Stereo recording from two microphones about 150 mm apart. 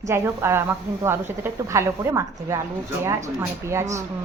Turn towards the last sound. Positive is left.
turn(degrees=-20)  # may be behind; listen again after turning